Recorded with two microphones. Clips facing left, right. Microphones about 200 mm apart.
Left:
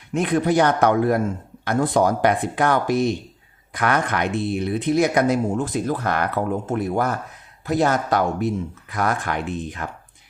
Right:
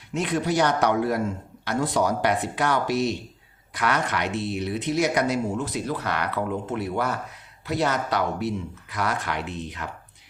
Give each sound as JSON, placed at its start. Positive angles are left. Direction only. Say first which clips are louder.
{"t": 0.1, "sound": "speech", "louder": "left 5 dB", "side_deg": 55}